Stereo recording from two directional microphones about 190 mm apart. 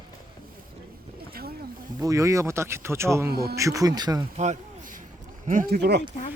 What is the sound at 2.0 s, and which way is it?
Speech, 15° right (ahead or behind).